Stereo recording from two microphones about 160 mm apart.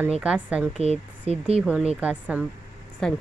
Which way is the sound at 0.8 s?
40° right (ahead or behind).